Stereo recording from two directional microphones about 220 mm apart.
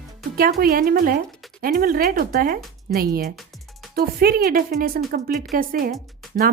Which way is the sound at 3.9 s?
45° right (ahead or behind).